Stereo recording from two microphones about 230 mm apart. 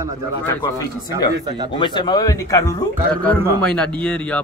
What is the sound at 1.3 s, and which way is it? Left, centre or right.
Speech, centre.